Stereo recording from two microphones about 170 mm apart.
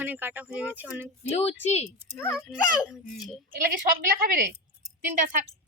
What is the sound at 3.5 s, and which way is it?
Speech, 55° right (ahead or behind).